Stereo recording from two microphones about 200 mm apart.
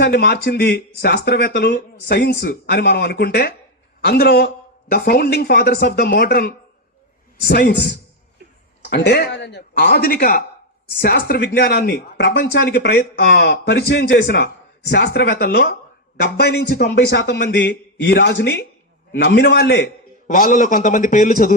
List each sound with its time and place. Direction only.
0.0 s a man's voice: 55° left (ahead or behind)
20.2 s a man's voice: 40° left (ahead or behind)